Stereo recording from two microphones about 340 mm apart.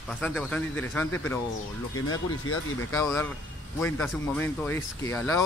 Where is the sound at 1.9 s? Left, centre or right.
Left.